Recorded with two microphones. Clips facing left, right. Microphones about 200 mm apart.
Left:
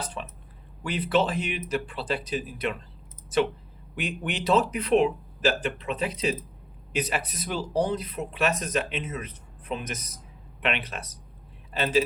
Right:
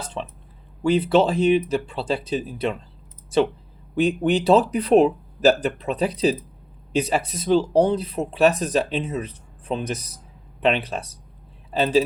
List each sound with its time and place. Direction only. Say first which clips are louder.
0.0 s speech: right 4 dB; 25° right (ahead or behind)
3.9 s speech: right 12 dB; 35° right (ahead or behind)